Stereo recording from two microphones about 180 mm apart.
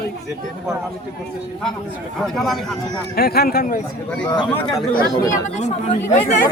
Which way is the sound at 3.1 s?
60° left (ahead or behind).